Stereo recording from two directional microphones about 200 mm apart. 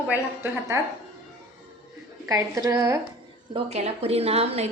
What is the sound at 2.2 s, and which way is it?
Speech, 15° right (ahead or behind).